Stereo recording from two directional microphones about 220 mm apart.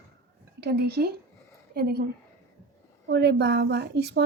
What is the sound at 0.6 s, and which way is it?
A woman's voice, 45° right (ahead or behind).